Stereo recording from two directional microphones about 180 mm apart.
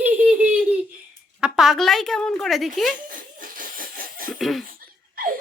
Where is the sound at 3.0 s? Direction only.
50° right (ahead or behind).